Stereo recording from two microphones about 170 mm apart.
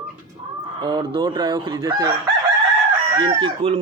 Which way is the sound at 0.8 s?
25° right (ahead or behind).